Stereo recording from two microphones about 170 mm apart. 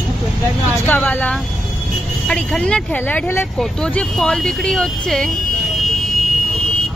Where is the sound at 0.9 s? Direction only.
10° left (ahead or behind).